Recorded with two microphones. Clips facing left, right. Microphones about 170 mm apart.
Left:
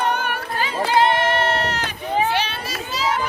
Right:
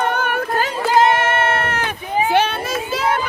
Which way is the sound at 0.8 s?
45° right (ahead or behind).